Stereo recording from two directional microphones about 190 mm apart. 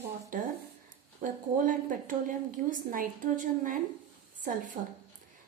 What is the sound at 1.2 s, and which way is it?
A woman's voice, 45° right (ahead or behind).